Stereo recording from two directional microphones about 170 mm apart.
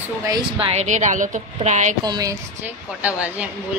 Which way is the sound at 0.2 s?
25° right (ahead or behind).